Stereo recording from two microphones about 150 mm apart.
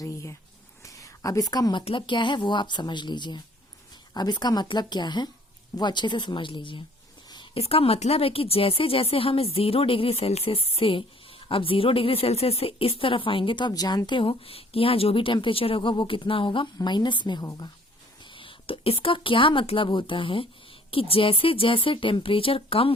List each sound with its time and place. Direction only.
0.0 s a sound: 20° left (ahead or behind)
1.8 s a woman's voice: 35° left (ahead or behind)
18.3 s a woman's voice: 35° left (ahead or behind)